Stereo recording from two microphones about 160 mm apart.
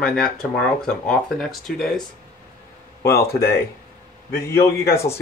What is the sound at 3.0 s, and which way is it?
Speech, 15° left (ahead or behind).